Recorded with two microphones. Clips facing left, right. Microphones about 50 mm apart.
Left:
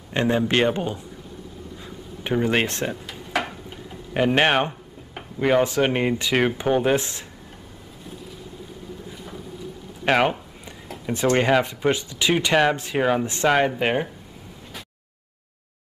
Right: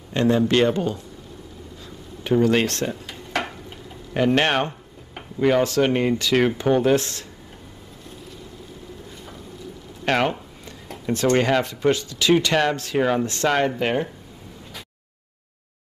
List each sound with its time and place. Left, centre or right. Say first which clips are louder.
0.1 s speech: right 2 dB; left
2.2 s speech: right 3 dB; left
3.1 s drawer open or close: left 1 dB; centre
4.1 s speech: even; centre
10.0 s speech: left 2 dB; centre